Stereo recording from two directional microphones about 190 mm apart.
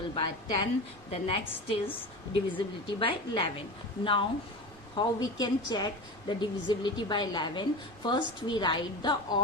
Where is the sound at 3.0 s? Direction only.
25° left (ahead or behind).